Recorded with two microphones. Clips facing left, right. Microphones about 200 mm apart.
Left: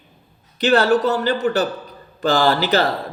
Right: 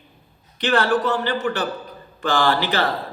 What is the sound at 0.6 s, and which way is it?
A man's voice, 40° left (ahead or behind).